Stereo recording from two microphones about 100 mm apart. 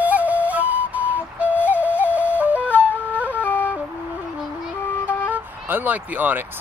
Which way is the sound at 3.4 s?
20° left (ahead or behind).